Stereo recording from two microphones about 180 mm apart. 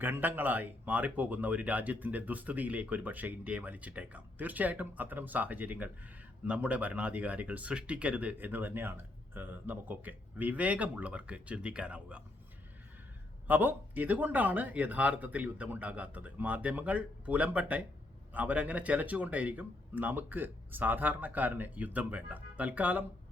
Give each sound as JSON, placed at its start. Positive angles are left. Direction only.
{"t": 0.0, "sound": "speech", "side_deg": -10}
{"t": 13.5, "sound": "speech", "side_deg": -10}